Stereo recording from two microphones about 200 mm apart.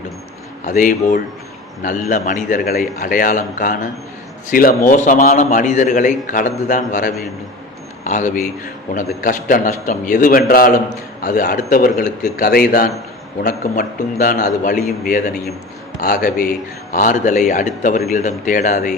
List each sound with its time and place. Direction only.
0.6 s a man's voice: 40° left (ahead or behind)